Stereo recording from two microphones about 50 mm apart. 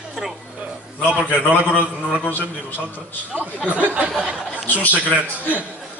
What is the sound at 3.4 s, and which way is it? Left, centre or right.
Speech, right.